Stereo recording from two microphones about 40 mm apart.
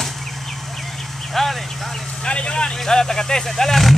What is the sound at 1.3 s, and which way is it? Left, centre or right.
Vehicle, centre.